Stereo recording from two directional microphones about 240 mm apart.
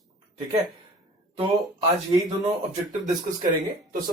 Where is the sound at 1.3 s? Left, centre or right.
Right.